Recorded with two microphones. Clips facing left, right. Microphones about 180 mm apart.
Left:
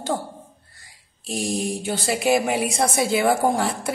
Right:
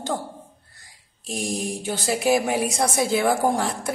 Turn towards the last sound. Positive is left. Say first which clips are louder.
# left 1 dB
turn(degrees=0)  # may be behind; listen again after turning